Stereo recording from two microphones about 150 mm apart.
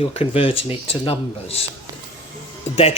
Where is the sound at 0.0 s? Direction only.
40° left (ahead or behind).